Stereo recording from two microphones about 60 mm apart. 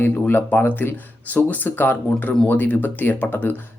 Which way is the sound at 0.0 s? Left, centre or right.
Left.